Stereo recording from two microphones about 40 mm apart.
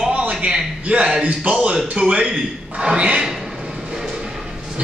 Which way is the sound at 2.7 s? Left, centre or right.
Right.